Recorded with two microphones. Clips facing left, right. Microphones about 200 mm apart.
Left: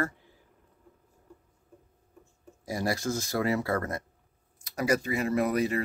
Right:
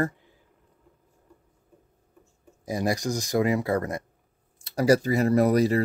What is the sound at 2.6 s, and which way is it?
Speech, 20° right (ahead or behind).